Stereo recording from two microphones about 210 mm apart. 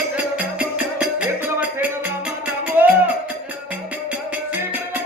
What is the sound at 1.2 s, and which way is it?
Music, 10° right (ahead or behind).